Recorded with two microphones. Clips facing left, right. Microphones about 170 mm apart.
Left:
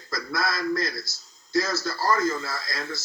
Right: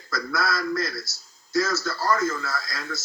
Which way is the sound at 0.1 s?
25° left (ahead or behind).